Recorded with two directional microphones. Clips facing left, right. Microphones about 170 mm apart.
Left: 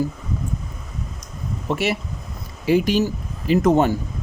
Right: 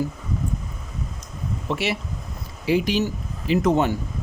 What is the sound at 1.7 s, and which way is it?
Speech, 45° left (ahead or behind).